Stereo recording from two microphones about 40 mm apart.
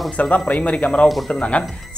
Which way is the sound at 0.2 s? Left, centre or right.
Left.